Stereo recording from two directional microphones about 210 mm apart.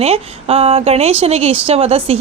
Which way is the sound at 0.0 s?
30° right (ahead or behind).